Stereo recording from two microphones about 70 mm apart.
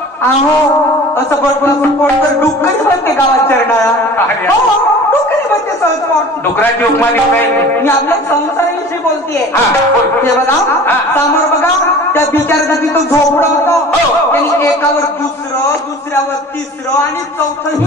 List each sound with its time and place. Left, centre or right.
1.1 s a man's voice: left
10.4 s a man's voice: left